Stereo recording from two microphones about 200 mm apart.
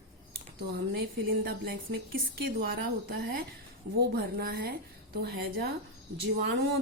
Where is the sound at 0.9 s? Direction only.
50° right (ahead or behind).